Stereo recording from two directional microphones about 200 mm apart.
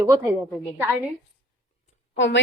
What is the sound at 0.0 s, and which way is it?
Speech, 15° right (ahead or behind).